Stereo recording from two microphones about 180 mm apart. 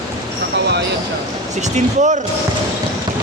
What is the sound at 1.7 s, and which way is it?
Speech, 40° right (ahead or behind).